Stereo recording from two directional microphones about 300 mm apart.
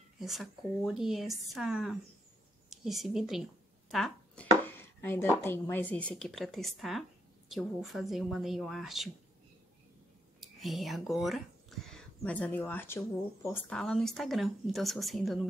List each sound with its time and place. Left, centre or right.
0.2 s speech: centre
3.9 s a sound: centre
5.4 s speech: centre
10.4 s speech: centre